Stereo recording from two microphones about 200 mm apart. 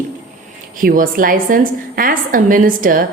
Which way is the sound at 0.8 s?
45° right (ahead or behind).